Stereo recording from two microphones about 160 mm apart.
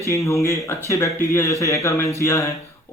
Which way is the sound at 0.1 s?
20° left (ahead or behind).